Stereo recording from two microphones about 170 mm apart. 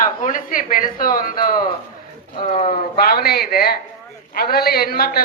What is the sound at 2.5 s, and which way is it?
Speech, 35° left (ahead or behind).